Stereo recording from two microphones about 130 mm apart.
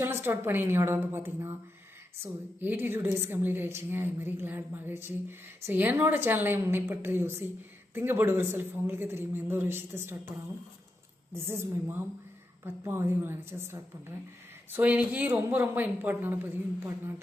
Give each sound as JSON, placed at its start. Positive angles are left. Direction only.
{"t": 0.0, "sound": "a woman's voice", "side_deg": -15}
{"t": 11.3, "sound": "a woman's voice", "side_deg": -20}